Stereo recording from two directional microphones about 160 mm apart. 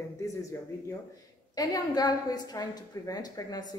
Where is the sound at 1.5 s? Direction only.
25° left (ahead or behind).